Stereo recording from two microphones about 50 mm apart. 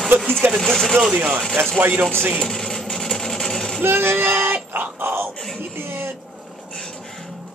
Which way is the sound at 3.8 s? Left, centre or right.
Right.